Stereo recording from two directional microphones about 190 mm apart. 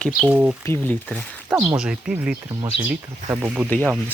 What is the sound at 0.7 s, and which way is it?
Speech, 5° left (ahead or behind).